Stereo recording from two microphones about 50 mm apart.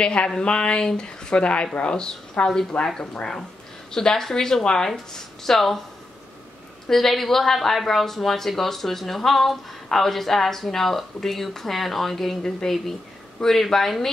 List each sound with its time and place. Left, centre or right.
0.0 s a woman's voice: left; by 5.8 s centre
6.9 s a woman's voice: centre